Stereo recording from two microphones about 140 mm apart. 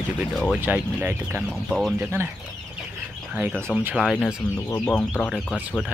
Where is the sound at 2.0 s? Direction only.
15° right (ahead or behind).